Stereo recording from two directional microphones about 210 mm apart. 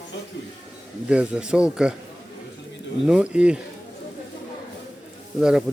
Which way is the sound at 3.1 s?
5° right (ahead or behind).